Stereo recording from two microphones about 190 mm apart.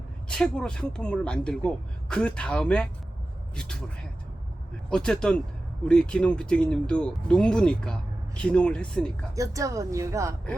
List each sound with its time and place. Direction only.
0.3 s speech: 5° left (ahead or behind)
4.9 s speech: 5° left (ahead or behind)
9.3 s a woman's voice: 15° right (ahead or behind)